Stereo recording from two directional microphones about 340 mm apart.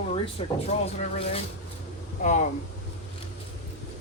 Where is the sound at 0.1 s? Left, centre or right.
Centre.